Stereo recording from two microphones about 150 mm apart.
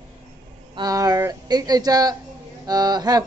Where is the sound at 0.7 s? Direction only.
25° right (ahead or behind).